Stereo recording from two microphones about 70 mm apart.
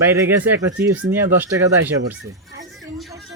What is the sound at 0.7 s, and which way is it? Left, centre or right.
Speech, right.